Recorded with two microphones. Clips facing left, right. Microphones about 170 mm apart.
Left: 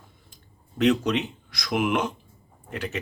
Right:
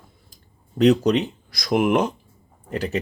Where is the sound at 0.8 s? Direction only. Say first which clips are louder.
Right 5 dB; 35° right (ahead or behind).